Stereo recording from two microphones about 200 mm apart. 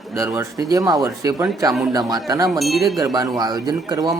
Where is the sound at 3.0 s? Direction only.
20° right (ahead or behind).